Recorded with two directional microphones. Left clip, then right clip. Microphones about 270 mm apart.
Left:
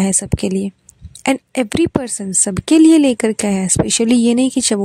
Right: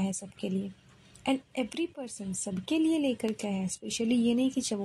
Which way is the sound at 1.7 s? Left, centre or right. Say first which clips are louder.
Left 18 dB; left.